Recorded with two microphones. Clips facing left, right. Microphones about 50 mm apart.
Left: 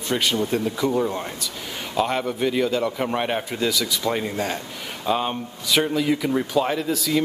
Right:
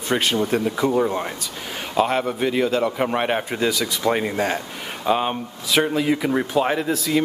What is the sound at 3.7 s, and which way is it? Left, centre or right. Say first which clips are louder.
Speech: right 3 dB; right.